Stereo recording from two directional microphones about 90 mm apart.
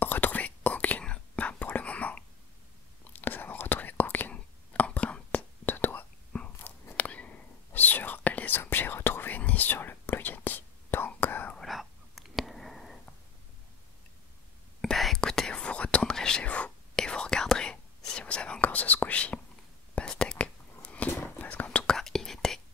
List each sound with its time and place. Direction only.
0.0 s whispering: 20° left (ahead or behind)
11.5 s whispering: centre (ahead or behind)
14.8 s whispering: centre (ahead or behind)